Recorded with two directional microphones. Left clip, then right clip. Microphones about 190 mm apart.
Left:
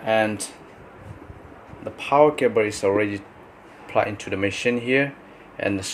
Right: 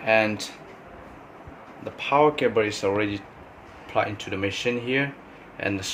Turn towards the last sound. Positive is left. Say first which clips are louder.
# left 3 dB
turn(degrees=25)  # may be behind; listen again after turning